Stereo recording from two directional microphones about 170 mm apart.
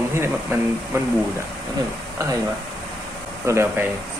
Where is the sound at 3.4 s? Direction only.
15° right (ahead or behind).